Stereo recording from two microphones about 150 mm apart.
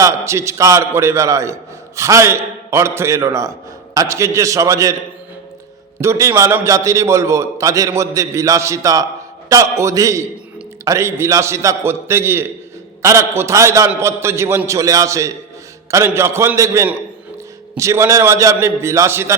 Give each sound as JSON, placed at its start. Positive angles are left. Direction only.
{"t": 0.0, "sound": "a man's voice", "side_deg": -20}
{"t": 6.0, "sound": "a man's voice", "side_deg": -20}